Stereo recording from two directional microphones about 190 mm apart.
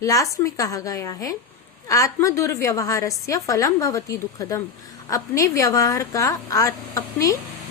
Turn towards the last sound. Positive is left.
turn(degrees=15)  # may be behind; listen again after turning